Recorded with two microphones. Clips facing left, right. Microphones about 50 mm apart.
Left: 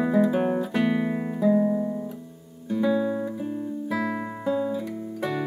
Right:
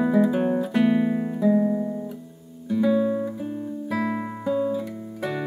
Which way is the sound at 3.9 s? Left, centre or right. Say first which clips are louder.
Right 3 dB; centre.